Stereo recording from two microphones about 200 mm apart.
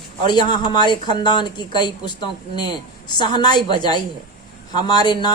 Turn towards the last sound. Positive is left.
turn(degrees=20)  # may be behind; listen again after turning